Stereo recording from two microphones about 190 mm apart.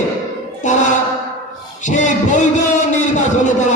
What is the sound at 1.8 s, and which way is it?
Heart murmur, 40° left (ahead or behind).